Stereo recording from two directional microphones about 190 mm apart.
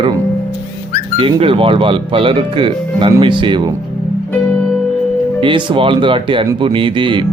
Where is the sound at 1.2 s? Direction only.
30° right (ahead or behind).